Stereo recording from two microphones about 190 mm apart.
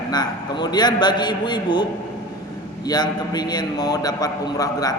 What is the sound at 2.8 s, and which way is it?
A man's voice, 20° left (ahead or behind).